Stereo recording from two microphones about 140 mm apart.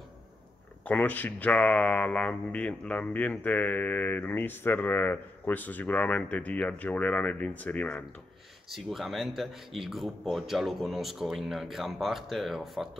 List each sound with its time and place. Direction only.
0.8 s speech: 10° left (ahead or behind)
8.6 s speech: centre (ahead or behind)